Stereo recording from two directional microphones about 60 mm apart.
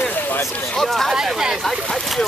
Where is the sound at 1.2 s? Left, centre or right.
Centre.